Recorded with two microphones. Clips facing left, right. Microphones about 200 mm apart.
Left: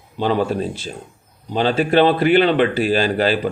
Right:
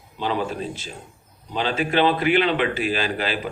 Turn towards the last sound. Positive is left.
turn(degrees=35)  # may be behind; listen again after turning